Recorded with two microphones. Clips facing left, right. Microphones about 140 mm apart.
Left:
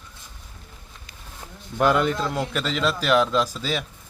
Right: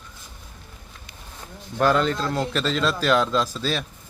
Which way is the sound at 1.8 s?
15° left (ahead or behind).